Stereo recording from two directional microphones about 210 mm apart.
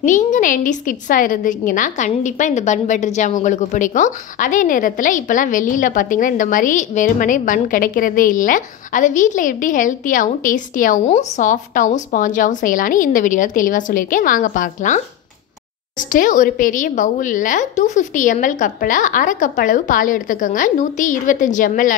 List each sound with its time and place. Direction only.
0.0 s a woman's voice: 35° left (ahead or behind)
16.0 s a woman's voice: 40° left (ahead or behind)